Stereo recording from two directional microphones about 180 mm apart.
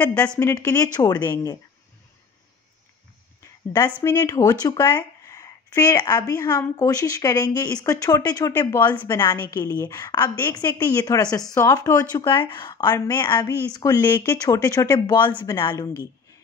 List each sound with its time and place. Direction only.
0.4 s a woman's voice: 15° left (ahead or behind)
4.0 s a woman's voice: 20° left (ahead or behind)
10.6 s a woman's voice: 10° left (ahead or behind)
11.0 s speech: 20° left (ahead or behind)
15.3 s a woman's voice: 10° left (ahead or behind)
15.6 s speech: 20° left (ahead or behind)